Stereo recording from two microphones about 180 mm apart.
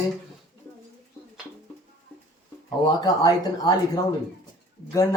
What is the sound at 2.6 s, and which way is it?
Speech, 20° left (ahead or behind).